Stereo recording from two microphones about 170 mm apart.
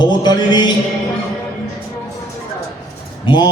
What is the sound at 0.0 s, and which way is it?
Mantra, 25° left (ahead or behind).